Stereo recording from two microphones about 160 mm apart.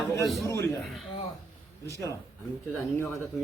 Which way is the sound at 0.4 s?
20° left (ahead or behind).